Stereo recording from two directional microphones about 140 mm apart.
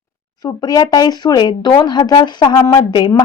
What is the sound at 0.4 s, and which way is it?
Speech, 30° left (ahead or behind).